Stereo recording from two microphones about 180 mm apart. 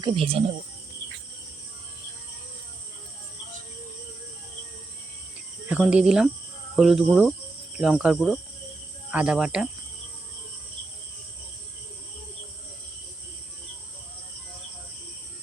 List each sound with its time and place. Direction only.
0.0 s speech: 30° right (ahead or behind)
5.6 s speech: 5° right (ahead or behind)